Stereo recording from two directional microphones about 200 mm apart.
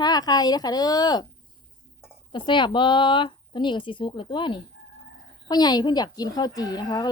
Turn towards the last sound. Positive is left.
turn(degrees=20)  # may be behind; listen again after turning